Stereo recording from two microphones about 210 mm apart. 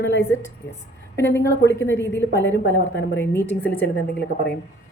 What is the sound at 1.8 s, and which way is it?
A woman's voice, 10° left (ahead or behind).